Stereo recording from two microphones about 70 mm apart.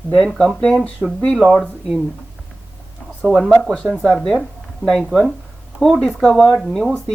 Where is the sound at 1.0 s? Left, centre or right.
Centre.